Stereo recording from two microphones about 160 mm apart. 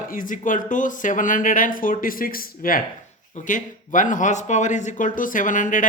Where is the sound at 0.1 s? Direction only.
55° left (ahead or behind).